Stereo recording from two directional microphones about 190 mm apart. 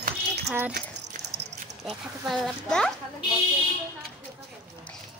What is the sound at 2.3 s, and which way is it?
Speech, centre (ahead or behind).